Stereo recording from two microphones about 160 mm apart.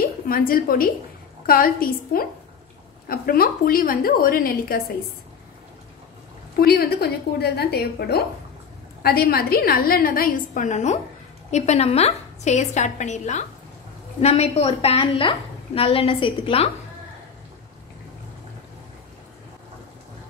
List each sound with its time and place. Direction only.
0.3 s a woman's voice: 65° left (ahead or behind)
6.6 s a woman's voice: 75° left (ahead or behind)
9.0 s a woman's voice: 70° left (ahead or behind); by 16.6 s 35° left (ahead or behind)